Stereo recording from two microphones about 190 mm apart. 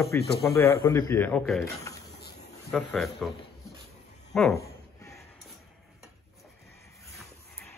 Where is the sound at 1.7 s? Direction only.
15° left (ahead or behind).